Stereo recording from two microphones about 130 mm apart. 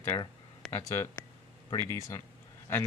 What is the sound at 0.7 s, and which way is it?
Speech, 25° left (ahead or behind).